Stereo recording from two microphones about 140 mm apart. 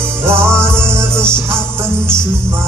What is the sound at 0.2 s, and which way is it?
Music, 20° right (ahead or behind).